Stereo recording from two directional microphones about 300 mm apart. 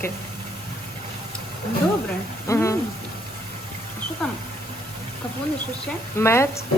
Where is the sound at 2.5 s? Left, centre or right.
Centre.